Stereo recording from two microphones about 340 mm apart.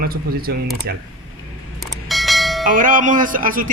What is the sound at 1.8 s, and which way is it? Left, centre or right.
Church bell, centre.